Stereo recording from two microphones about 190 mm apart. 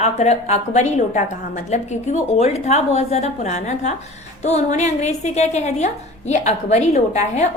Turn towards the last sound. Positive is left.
turn(degrees=35)  # may be behind; listen again after turning